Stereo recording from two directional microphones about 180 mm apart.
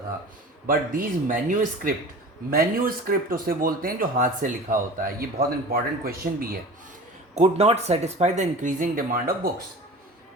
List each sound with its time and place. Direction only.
0.7 s speech: 50° right (ahead or behind)
7.3 s speech: 35° right (ahead or behind)